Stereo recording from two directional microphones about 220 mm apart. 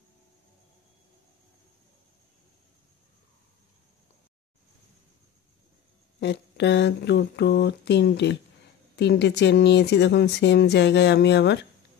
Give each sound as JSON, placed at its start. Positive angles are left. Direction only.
{"t": 6.1, "sound": "speech", "side_deg": 50}